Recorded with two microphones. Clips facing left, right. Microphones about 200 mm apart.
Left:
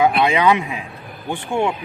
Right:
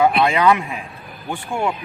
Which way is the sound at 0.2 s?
15° left (ahead or behind).